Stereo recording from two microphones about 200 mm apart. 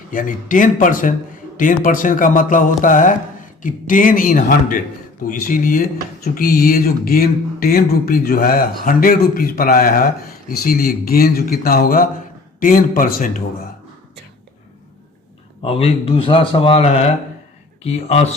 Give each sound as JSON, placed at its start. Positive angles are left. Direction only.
{"t": 0.1, "sound": "speech", "side_deg": 40}
{"t": 15.6, "sound": "speech", "side_deg": 30}